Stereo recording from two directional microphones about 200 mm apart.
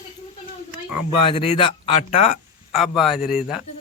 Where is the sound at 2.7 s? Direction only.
Centre (ahead or behind).